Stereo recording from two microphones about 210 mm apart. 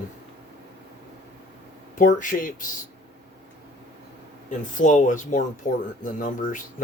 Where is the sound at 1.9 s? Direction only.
40° left (ahead or behind).